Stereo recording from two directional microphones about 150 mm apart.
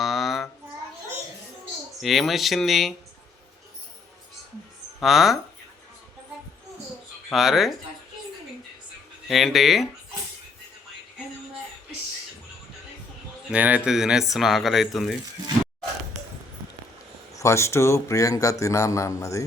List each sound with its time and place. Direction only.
0.0 s a sound: centre (ahead or behind)
2.0 s speech: centre (ahead or behind)
4.9 s speech: centre (ahead or behind)
7.3 s speech: centre (ahead or behind)
9.2 s speech: centre (ahead or behind)
13.5 s speech: 10° right (ahead or behind)
17.3 s a man's voice: 20° left (ahead or behind)